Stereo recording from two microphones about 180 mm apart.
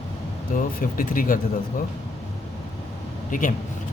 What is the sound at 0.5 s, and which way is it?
Speech, 50° left (ahead or behind).